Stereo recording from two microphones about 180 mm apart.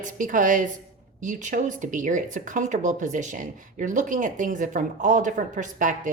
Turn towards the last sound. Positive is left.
turn(degrees=-45)  # may be behind; listen again after turning